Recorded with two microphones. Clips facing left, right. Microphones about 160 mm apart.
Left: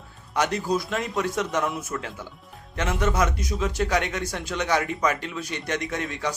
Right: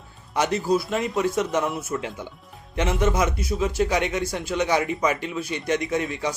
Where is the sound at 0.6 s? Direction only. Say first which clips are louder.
Right 3 dB; 5° right (ahead or behind).